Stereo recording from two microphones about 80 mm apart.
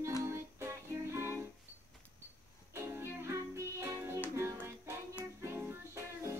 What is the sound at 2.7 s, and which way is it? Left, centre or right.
Music, right.